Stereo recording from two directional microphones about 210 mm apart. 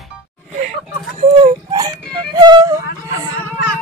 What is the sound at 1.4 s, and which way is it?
Music, 20° right (ahead or behind).